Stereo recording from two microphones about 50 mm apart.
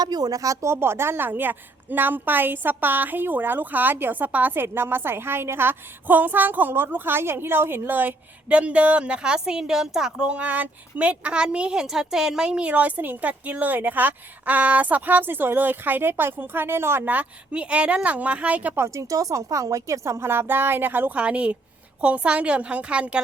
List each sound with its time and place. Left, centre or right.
0.5 s speech: right
4.6 s a woman's voice: right
7.9 s speech: right
8.4 s a woman's voice: right
10.3 s a woman's voice: right; by 12.5 s centre
12.5 s speech: right
17.1 s a woman's voice: right
18.9 s a woman's voice: right
20.5 s a woman's voice: right
21.2 s a woman's voice: right